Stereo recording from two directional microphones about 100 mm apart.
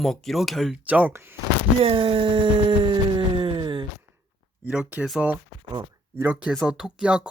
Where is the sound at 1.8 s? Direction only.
65° right (ahead or behind).